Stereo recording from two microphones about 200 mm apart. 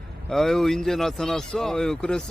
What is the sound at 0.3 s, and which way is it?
Speech, centre (ahead or behind).